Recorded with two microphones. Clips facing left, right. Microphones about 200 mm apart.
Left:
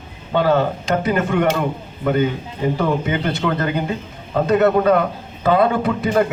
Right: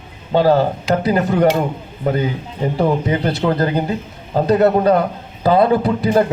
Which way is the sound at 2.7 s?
35° right (ahead or behind).